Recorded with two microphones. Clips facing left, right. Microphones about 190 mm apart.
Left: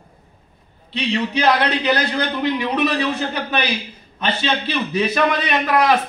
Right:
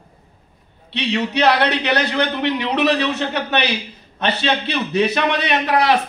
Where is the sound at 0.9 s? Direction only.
70° right (ahead or behind).